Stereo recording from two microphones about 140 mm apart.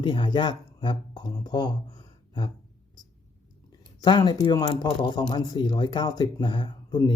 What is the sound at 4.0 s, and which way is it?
Speech, 35° left (ahead or behind).